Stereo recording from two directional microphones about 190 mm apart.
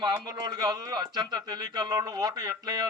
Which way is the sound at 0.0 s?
20° right (ahead or behind).